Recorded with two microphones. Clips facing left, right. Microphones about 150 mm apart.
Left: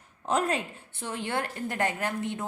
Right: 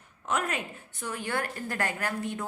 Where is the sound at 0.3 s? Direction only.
30° left (ahead or behind).